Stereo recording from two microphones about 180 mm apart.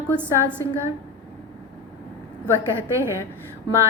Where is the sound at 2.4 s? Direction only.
15° right (ahead or behind).